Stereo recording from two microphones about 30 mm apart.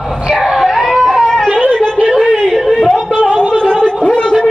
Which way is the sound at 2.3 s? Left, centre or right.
Centre.